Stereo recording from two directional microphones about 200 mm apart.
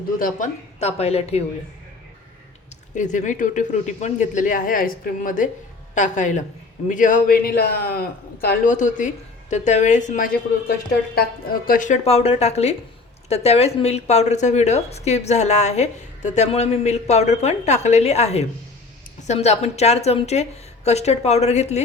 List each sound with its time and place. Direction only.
0.2 s speech: 40° left (ahead or behind)
2.9 s a man's voice: 40° left (ahead or behind)
8.4 s speech: 40° left (ahead or behind)
11.1 s speech: 50° left (ahead or behind); by 21.8 s 35° left (ahead or behind)